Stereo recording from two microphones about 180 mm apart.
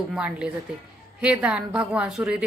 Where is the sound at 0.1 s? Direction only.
5° right (ahead or behind).